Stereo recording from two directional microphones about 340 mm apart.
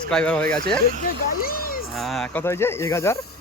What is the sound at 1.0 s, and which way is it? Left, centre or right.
Speech, left.